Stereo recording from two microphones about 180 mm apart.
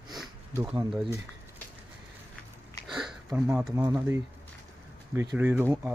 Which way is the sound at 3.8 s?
10° right (ahead or behind).